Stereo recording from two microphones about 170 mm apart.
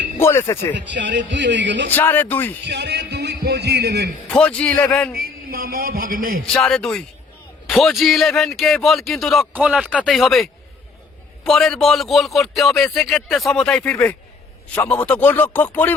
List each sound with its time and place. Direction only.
0.2 s speech: 15° left (ahead or behind)
0.9 s speech: 90° right
1.9 s speech: 10° left (ahead or behind)
2.6 s speech: 80° right
4.3 s speech: 5° left (ahead or behind)
5.2 s a man's voice: 60° right (ahead or behind)
6.4 s speech: 5° left (ahead or behind)